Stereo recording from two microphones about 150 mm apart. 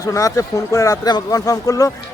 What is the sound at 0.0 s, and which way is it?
Speech, 20° left (ahead or behind).